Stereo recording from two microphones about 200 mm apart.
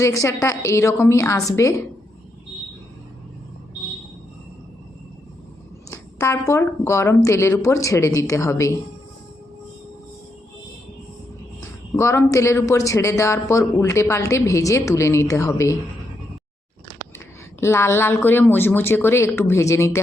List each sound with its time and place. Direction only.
0.0 s speech: 15° left (ahead or behind)
5.9 s speech: 15° left (ahead or behind)
11.9 s speech: 15° left (ahead or behind)
17.6 s speech: 10° left (ahead or behind)